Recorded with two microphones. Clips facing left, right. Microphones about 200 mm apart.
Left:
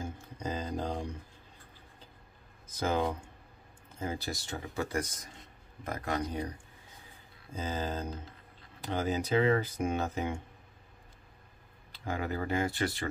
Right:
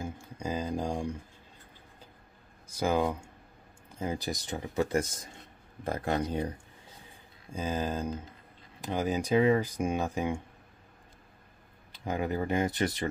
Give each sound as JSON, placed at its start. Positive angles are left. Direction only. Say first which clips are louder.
{"t": 0.0, "sound": "a sound", "louder": "right 2 dB", "side_deg": -10}
{"t": 2.7, "sound": "speech", "louder": "right 3 dB", "side_deg": -10}
{"t": 7.5, "sound": "speech", "louder": "right 3 dB", "side_deg": -15}
{"t": 11.9, "sound": "speech", "louder": "right 3 dB", "side_deg": -20}